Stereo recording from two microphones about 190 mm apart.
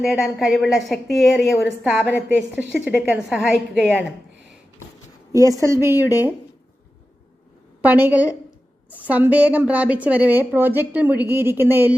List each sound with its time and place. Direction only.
0.0 s a woman's voice: centre (ahead or behind)
5.3 s a woman's voice: 20° right (ahead or behind)
7.8 s a woman's voice: 10° right (ahead or behind)